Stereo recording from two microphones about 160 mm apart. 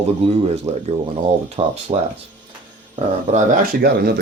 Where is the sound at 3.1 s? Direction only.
45° right (ahead or behind).